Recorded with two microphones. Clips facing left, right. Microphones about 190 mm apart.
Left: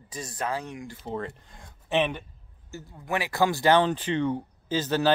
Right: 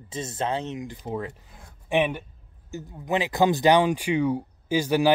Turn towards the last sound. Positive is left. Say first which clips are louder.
# right 3 dB
turn(degrees=-10)  # may be behind; listen again after turning